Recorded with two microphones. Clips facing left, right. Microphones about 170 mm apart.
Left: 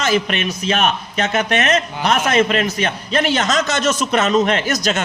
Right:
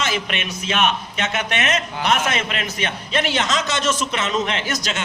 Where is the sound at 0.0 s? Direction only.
40° left (ahead or behind).